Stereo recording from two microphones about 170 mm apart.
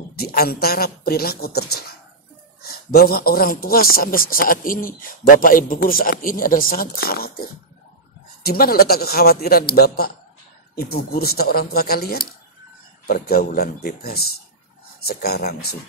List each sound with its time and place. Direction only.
0.1 s a man's voice: 65° left (ahead or behind)